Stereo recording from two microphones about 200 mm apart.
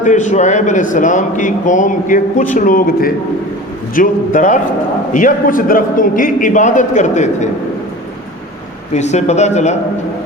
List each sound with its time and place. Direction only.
0.0 s a man's voice: 40° left (ahead or behind)
8.9 s a man's voice: 35° left (ahead or behind)